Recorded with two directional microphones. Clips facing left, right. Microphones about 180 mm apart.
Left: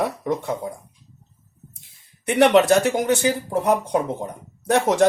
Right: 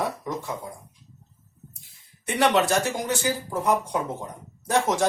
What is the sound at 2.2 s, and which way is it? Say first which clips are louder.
Speech: left 7 dB; 60° left (ahead or behind).